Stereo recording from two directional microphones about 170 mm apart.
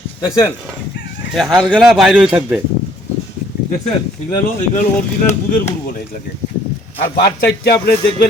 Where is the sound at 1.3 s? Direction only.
Centre (ahead or behind).